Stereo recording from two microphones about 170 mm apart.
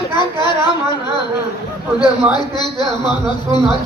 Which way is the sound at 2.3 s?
25° left (ahead or behind).